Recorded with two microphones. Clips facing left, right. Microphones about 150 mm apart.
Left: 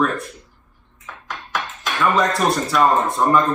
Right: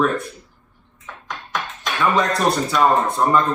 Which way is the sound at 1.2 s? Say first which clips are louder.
Even; centre (ahead or behind).